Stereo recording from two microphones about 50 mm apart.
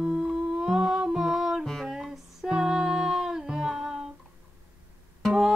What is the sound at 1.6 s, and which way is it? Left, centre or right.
Music, centre.